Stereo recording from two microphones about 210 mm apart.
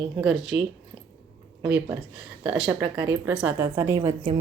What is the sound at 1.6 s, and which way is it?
Speech, 10° right (ahead or behind).